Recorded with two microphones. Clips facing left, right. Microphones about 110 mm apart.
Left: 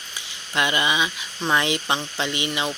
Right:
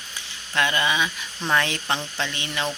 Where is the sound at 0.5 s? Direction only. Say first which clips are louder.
Even; 15° left (ahead or behind).